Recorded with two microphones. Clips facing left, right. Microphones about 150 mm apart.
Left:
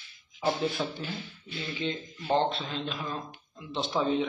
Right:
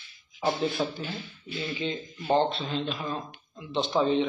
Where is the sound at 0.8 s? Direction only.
25° right (ahead or behind).